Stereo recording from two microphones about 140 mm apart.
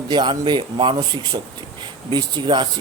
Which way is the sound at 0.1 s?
35° right (ahead or behind).